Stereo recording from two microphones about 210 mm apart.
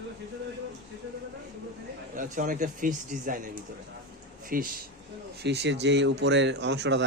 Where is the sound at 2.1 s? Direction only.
40° right (ahead or behind).